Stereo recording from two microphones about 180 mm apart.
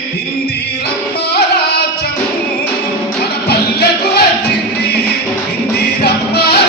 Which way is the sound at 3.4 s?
60° left (ahead or behind).